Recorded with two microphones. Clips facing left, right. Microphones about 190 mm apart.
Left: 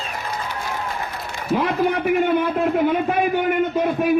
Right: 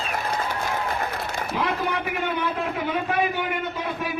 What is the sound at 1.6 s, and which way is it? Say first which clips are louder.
A man's voice: left 6 dB; 50° left (ahead or behind).